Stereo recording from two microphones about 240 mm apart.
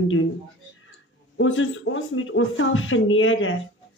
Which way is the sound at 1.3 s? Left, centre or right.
Left.